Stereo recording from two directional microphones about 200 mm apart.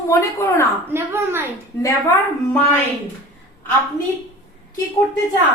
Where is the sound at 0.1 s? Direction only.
15° left (ahead or behind).